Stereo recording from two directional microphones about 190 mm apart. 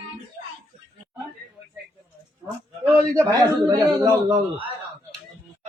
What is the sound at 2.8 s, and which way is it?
A man's voice, 15° right (ahead or behind).